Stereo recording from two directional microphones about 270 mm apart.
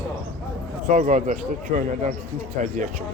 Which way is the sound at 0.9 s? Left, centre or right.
Right.